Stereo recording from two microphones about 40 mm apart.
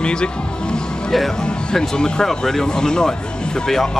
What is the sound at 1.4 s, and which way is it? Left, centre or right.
Speech, centre.